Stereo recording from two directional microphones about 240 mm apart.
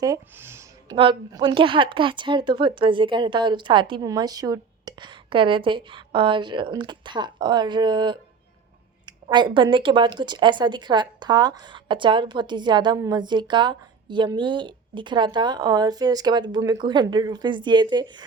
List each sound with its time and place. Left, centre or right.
0.0 s speech: centre